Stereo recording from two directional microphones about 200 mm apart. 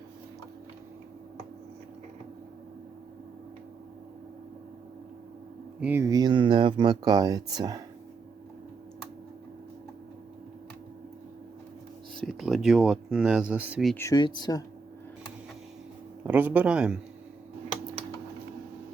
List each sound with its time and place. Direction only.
5.8 s speech: 10° right (ahead or behind)
12.1 s speech: centre (ahead or behind)
13.9 s speech: 15° left (ahead or behind)
16.2 s speech: 10° right (ahead or behind)